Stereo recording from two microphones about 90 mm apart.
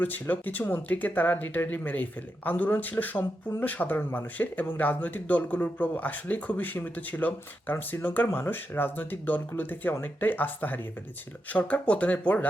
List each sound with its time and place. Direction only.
0.0 s speech: 20° left (ahead or behind)